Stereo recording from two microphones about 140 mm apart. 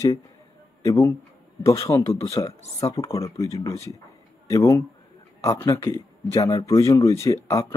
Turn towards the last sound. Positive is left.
turn(degrees=20)  # may be behind; listen again after turning